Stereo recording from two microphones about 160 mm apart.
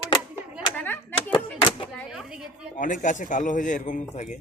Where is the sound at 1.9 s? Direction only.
Centre (ahead or behind).